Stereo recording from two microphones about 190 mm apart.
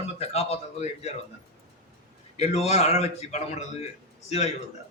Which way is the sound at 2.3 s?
35° left (ahead or behind).